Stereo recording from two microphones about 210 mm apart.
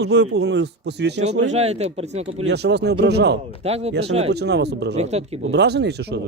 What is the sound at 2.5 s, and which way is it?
Speech, 55° right (ahead or behind).